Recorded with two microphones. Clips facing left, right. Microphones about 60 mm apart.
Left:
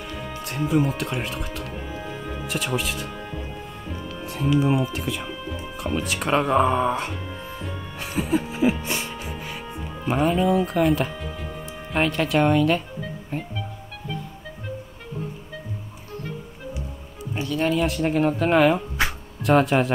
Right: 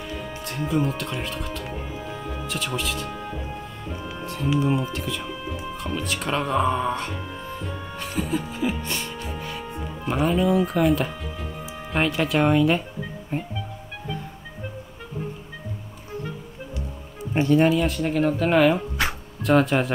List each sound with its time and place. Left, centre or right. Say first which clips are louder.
0.4 s speech: left 3 dB; centre
4.6 s speech: left 2 dB; centre
8.0 s music: left 3 dB; centre
10.1 s speech: left 1 dB; centre
17.3 s music: right 8 dB; right
17.7 s speech: left 1 dB; centre